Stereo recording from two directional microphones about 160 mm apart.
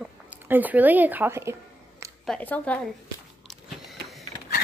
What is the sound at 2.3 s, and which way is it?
Speech, 10° left (ahead or behind).